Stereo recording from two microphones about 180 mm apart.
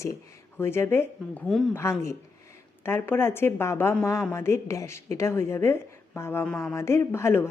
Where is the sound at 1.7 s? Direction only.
15° left (ahead or behind).